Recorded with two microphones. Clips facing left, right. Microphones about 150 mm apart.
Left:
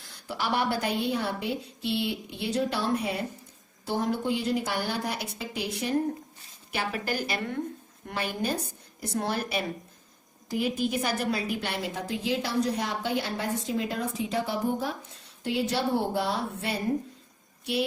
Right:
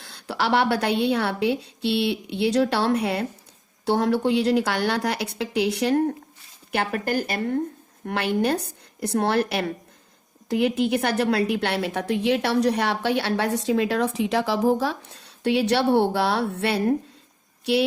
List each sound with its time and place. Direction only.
0.0 s a woman's voice: 70° right (ahead or behind)
6.7 s a woman's voice: 55° right (ahead or behind)
8.0 s a woman's voice: 65° right (ahead or behind)